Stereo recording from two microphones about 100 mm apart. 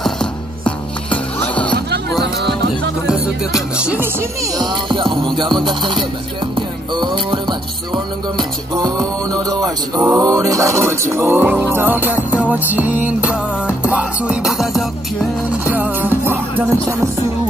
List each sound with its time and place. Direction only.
0.0 s music: 10° left (ahead or behind)
3.1 s music: 5° right (ahead or behind)
4.0 s music: 25° right (ahead or behind)
4.6 s music: 50° right (ahead or behind); by 14.9 s centre (ahead or behind)
15.6 s music: 15° right (ahead or behind)